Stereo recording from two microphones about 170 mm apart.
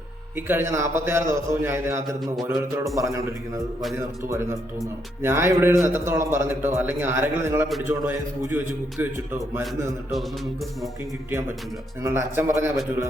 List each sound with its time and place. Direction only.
0.3 s a man's voice: 10° right (ahead or behind)
4.3 s a man's voice: 15° right (ahead or behind)
9.6 s a man's voice: centre (ahead or behind)
11.3 s a man's voice: 15° right (ahead or behind)